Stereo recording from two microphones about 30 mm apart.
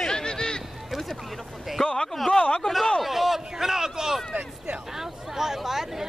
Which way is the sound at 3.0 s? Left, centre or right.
Centre.